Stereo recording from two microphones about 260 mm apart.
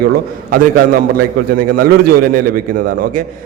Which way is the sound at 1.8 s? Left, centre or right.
Right.